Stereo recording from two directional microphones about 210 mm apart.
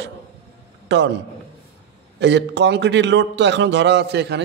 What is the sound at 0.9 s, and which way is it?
Speech, 60° right (ahead or behind).